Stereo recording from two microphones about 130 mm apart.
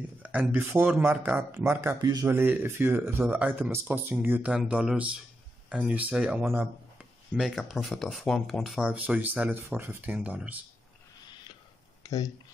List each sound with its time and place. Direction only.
0.2 s speech: 10° right (ahead or behind)
2.0 s speech: 30° right (ahead or behind)
2.2 s speech: 15° right (ahead or behind)
7.3 s speech: centre (ahead or behind)
12.0 s a sound: 25° left (ahead or behind)